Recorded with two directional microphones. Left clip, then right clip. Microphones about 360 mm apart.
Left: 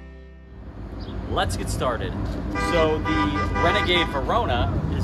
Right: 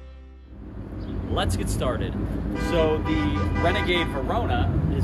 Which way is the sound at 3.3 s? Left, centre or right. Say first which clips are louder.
Left 3 dB; left.